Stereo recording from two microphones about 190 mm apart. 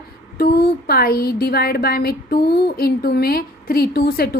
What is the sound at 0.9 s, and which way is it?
Speech, 55° left (ahead or behind).